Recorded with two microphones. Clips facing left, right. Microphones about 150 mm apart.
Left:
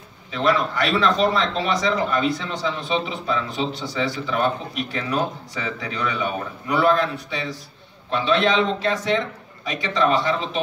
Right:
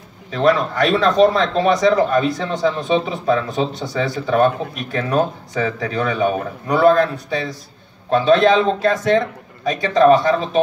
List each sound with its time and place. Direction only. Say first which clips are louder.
0.3 s a man's voice: right 5 dB; 40° right (ahead or behind)